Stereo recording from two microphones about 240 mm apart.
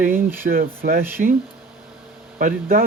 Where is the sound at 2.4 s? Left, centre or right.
Right.